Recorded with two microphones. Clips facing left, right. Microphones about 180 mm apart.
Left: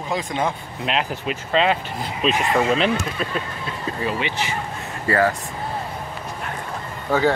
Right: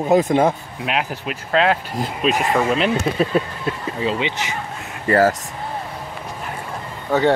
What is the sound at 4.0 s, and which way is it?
Speech, 20° right (ahead or behind).